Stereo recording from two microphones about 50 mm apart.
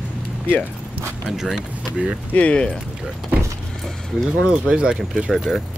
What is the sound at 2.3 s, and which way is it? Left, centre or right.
Speech, left.